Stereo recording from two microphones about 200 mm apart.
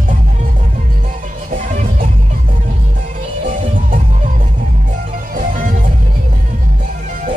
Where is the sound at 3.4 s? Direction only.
30° right (ahead or behind).